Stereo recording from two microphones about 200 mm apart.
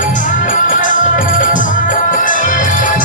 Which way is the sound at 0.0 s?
40° left (ahead or behind).